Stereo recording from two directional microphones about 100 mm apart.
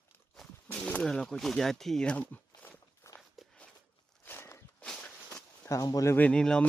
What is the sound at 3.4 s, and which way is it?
Walk, centre (ahead or behind).